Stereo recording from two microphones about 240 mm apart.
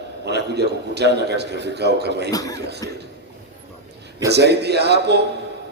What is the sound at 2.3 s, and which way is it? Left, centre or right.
Speech, centre.